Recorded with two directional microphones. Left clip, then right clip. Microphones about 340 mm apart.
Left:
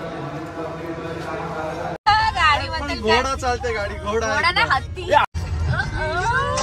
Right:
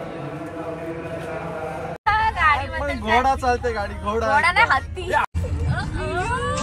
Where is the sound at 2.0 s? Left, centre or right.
Centre.